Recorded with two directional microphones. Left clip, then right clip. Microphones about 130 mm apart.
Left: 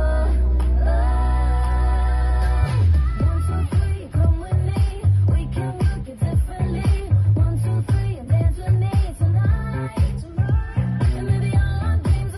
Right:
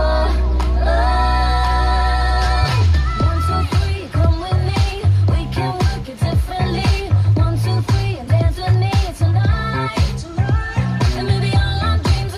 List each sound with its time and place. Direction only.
0.0 s music: 40° left (ahead or behind)
6.6 s music: 35° left (ahead or behind)
8.3 s music: 30° left (ahead or behind)